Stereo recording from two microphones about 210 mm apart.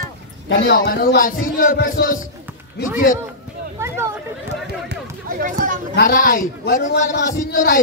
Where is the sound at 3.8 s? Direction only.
15° right (ahead or behind).